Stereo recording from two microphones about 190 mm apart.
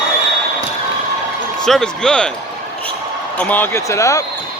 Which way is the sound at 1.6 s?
5° left (ahead or behind).